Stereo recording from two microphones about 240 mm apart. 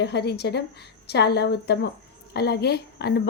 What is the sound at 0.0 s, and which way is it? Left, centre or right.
A woman's voice, left.